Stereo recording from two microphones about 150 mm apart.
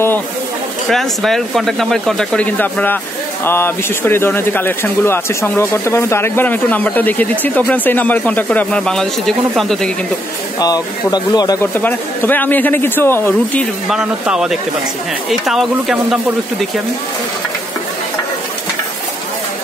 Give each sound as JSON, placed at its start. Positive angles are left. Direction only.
{"t": 0.8, "sound": "speech", "side_deg": 0}
{"t": 10.6, "sound": "speech", "side_deg": 25}
{"t": 11.6, "sound": "speech", "side_deg": 15}
{"t": 13.8, "sound": "speech", "side_deg": -5}